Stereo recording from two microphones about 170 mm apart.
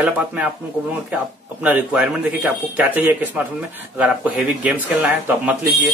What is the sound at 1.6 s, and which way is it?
Speech, 5° right (ahead or behind).